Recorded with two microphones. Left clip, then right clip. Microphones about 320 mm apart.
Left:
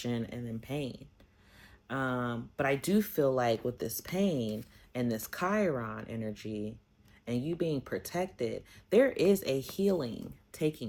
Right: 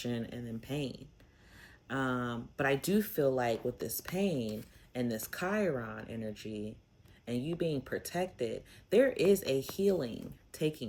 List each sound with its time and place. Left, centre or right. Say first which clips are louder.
0.0 s speech: left 2 dB; centre